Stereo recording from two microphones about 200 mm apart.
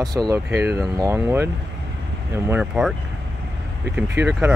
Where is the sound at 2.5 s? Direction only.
5° right (ahead or behind).